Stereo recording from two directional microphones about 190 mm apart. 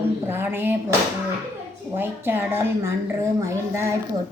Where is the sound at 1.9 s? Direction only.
10° right (ahead or behind).